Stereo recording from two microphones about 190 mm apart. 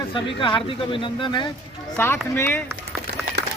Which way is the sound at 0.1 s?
25° left (ahead or behind).